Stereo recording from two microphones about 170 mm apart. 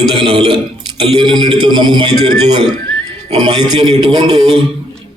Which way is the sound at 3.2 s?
30° right (ahead or behind).